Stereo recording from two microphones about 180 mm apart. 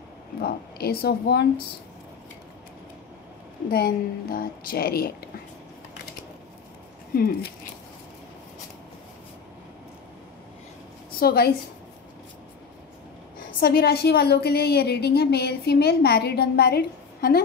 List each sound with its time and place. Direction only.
0.4 s a woman's voice: 60° left (ahead or behind)
3.7 s a woman's voice: 60° left (ahead or behind)
7.2 s a woman's voice: 55° left (ahead or behind)
11.1 s a woman's voice: 60° left (ahead or behind)
13.6 s a woman's voice: 60° left (ahead or behind)